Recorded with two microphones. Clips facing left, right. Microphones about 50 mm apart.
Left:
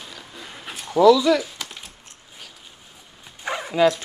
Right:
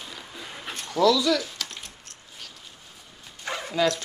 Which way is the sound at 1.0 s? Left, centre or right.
Centre.